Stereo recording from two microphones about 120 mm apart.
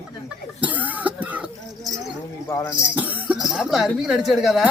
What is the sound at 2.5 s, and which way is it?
Speech, 25° left (ahead or behind).